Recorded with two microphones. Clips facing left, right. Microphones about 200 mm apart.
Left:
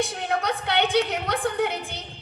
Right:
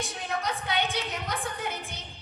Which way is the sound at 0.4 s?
65° left (ahead or behind).